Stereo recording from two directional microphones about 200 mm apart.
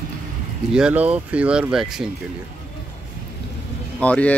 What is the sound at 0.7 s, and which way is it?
Speech, 5° right (ahead or behind).